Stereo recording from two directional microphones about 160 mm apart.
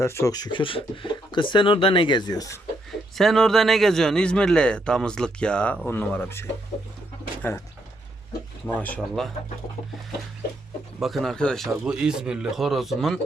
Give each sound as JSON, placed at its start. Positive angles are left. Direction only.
{"t": 0.0, "sound": "speech", "side_deg": 15}
{"t": 3.2, "sound": "a man's voice", "side_deg": 0}
{"t": 7.4, "sound": "speech", "side_deg": 10}
{"t": 8.6, "sound": "a man's voice", "side_deg": 10}
{"t": 11.0, "sound": "a man's voice", "side_deg": 0}